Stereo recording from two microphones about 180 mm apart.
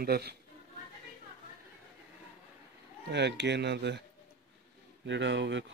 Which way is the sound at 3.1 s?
70° right (ahead or behind).